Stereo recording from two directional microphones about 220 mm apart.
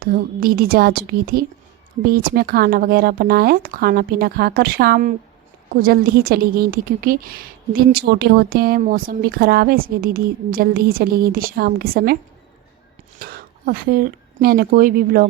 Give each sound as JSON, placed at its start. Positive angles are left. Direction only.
{"t": 0.0, "sound": "a woman's voice", "side_deg": -40}
{"t": 13.1, "sound": "speech", "side_deg": -45}